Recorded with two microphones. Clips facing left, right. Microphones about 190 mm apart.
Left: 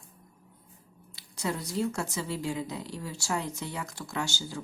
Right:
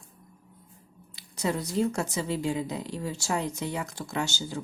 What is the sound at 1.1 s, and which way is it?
Speech, 20° right (ahead or behind).